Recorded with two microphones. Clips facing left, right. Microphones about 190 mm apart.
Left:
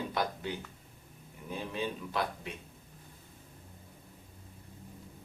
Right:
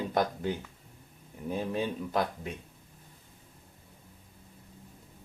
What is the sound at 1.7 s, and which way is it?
Speech, 45° right (ahead or behind).